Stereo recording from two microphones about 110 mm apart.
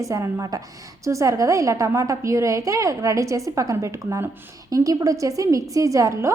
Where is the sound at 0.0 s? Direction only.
30° right (ahead or behind).